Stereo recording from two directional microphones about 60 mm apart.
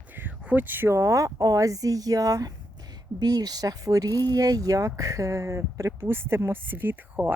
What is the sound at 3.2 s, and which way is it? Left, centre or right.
Speech, right.